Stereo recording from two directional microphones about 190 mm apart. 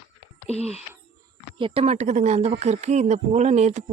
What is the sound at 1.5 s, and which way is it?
Speech, 30° right (ahead or behind).